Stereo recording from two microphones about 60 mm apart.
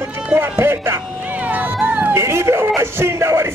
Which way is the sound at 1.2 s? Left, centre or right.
Right.